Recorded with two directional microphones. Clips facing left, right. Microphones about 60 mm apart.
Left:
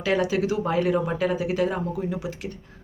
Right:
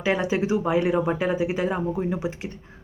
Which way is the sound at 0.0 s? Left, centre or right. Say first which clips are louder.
Even; right.